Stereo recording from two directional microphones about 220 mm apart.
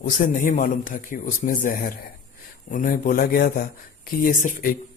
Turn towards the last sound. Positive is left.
turn(degrees=40)  # may be behind; listen again after turning